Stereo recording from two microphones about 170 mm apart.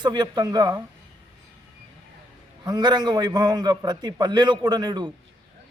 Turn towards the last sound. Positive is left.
turn(degrees=-25)  # may be behind; listen again after turning